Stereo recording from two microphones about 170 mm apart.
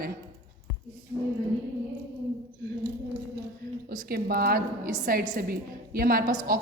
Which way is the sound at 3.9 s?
60° right (ahead or behind).